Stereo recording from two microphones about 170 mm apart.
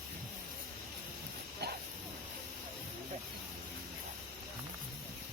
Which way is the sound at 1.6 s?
70° right (ahead or behind).